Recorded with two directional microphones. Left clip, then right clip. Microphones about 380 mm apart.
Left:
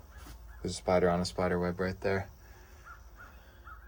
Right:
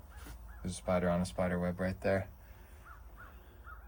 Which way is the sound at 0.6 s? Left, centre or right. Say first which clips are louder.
Left 6 dB; centre.